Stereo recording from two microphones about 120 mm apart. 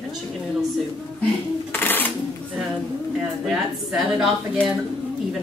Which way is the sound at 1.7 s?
15° left (ahead or behind).